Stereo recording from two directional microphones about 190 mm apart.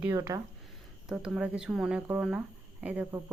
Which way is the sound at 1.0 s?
5° right (ahead or behind).